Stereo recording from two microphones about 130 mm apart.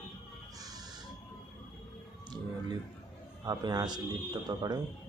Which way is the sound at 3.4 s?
30° right (ahead or behind).